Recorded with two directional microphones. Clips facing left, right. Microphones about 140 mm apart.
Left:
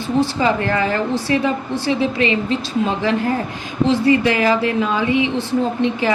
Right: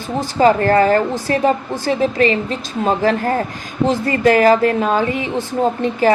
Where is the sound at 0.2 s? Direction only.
45° right (ahead or behind).